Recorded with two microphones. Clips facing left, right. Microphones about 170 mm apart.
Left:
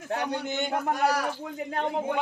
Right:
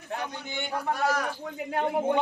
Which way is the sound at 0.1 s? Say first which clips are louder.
Left 5 dB; 80° left.